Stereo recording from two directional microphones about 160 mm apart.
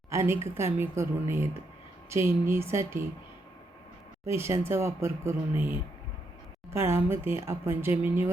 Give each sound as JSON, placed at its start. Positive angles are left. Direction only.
{"t": 0.1, "sound": "a woman's voice", "side_deg": -15}
{"t": 4.3, "sound": "speech", "side_deg": -15}